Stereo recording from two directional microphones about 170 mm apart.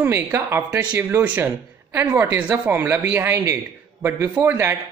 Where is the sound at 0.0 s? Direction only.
15° right (ahead or behind).